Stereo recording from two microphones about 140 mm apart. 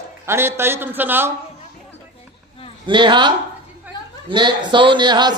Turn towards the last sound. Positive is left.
turn(degrees=-35)  # may be behind; listen again after turning